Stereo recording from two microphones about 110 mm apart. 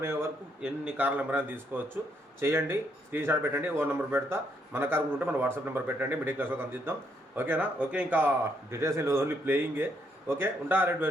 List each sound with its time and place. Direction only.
0.0 s speech: 25° right (ahead or behind)
0.6 s speech: 10° right (ahead or behind)
8.7 s speech: 25° right (ahead or behind)